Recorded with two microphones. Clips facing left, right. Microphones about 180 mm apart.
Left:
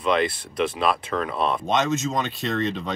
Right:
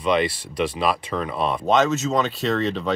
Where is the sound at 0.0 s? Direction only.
Centre (ahead or behind).